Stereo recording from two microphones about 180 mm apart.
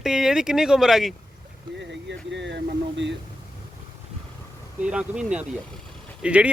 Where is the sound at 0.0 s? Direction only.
5° right (ahead or behind).